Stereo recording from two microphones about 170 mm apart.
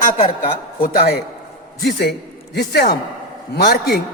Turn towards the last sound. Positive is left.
turn(degrees=70)  # may be behind; listen again after turning